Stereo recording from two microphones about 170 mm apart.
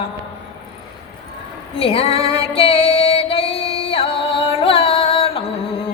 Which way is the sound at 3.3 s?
35° left (ahead or behind).